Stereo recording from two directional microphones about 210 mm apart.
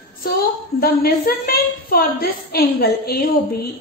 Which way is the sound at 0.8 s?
45° left (ahead or behind).